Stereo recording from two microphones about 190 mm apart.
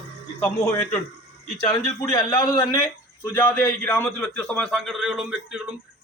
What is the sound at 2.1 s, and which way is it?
A man's voice, 15° left (ahead or behind).